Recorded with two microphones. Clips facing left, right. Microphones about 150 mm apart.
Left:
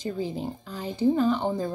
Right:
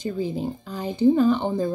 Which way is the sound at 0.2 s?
15° right (ahead or behind).